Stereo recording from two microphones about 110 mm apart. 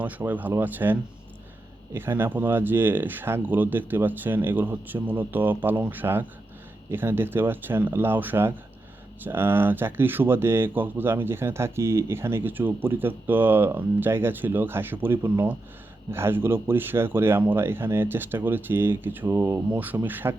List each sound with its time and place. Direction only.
0.0 s speech: 15° right (ahead or behind)